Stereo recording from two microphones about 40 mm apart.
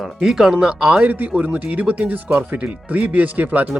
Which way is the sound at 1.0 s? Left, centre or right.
Right.